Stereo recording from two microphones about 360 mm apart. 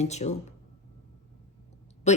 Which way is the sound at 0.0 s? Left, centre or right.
Centre.